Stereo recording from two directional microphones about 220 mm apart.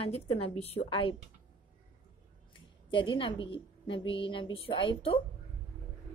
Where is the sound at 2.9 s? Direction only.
20° left (ahead or behind).